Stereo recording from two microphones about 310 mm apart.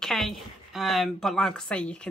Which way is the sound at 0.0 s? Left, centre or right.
Centre.